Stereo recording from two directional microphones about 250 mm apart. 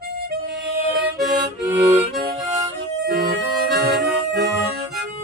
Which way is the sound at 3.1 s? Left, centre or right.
Right.